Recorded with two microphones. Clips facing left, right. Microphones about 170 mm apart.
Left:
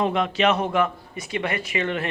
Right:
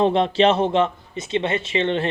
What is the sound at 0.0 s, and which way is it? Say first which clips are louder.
A man's voice: right 5 dB; 30° right (ahead or behind).